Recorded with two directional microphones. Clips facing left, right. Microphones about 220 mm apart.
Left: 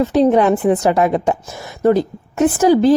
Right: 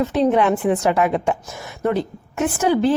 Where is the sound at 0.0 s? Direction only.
35° left (ahead or behind).